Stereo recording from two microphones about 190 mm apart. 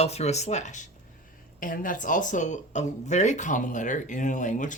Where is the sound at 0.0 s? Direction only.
35° left (ahead or behind).